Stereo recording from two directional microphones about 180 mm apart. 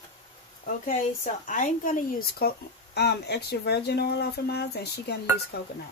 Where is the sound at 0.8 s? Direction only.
45° left (ahead or behind); by 5.2 s 65° left (ahead or behind).